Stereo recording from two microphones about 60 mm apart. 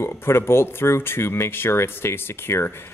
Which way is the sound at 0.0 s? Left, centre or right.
Left.